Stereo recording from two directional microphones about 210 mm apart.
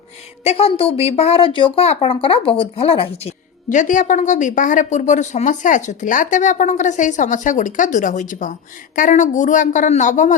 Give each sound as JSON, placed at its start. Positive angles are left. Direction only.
{"t": 0.4, "sound": "speech", "side_deg": 30}